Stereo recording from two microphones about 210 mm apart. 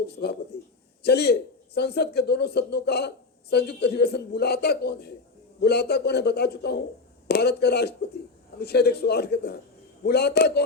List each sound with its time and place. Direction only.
0.1 s speech: 50° left (ahead or behind)